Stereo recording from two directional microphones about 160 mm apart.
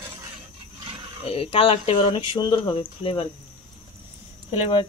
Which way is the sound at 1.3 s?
35° left (ahead or behind).